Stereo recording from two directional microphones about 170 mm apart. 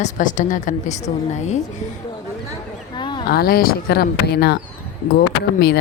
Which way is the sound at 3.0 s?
25° left (ahead or behind).